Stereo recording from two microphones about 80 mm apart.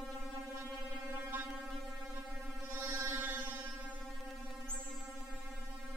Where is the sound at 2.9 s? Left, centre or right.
Right.